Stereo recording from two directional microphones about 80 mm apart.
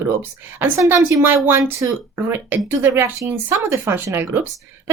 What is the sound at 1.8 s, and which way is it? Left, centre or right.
Speech, right.